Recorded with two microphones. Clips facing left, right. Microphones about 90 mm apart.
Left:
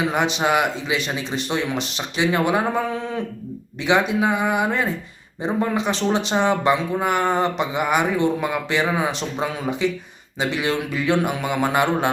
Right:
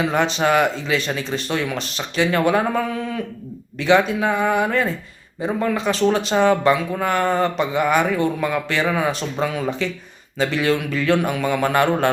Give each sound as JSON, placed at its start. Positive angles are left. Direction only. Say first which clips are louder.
{"t": 0.1, "sound": "speech", "louder": "right 2 dB", "side_deg": 15}